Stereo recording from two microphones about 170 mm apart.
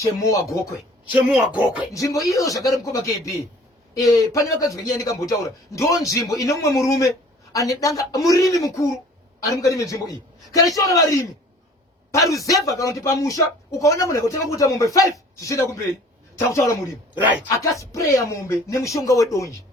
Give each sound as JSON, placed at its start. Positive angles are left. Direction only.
{"t": 0.0, "sound": "a man's voice", "side_deg": 20}
{"t": 1.1, "sound": "a man's voice", "side_deg": -10}
{"t": 1.9, "sound": "a man's voice", "side_deg": 20}
{"t": 17.2, "sound": "a man's voice", "side_deg": -10}
{"t": 17.6, "sound": "speech", "side_deg": 20}